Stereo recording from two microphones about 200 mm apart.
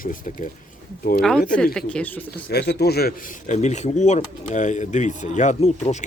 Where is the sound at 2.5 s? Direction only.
55° left (ahead or behind).